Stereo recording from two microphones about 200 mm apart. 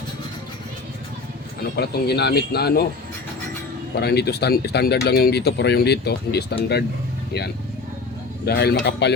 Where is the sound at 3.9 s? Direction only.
55° left (ahead or behind).